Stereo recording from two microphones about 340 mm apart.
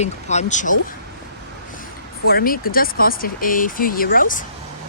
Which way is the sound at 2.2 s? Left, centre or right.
Left.